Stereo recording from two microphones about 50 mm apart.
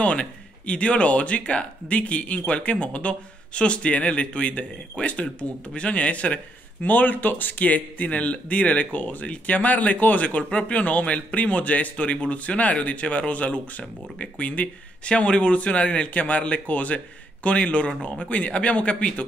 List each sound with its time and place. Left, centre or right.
0.0 s speech: left
6.8 s speech: left